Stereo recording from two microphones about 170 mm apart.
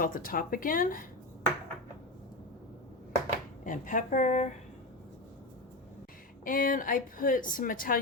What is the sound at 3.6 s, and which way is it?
Speech, 50° left (ahead or behind).